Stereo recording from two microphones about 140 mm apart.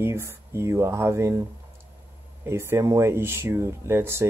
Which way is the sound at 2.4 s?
20° right (ahead or behind).